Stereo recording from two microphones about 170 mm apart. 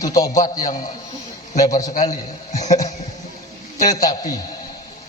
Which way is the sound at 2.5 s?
45° left (ahead or behind).